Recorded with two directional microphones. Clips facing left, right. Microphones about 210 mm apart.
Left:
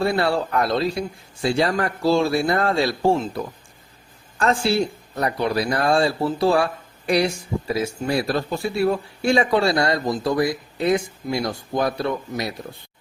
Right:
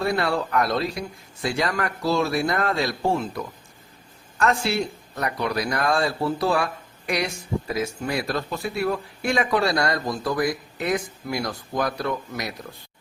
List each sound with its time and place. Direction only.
0.0 s speech: 30° left (ahead or behind)
7.7 s speech: 30° left (ahead or behind)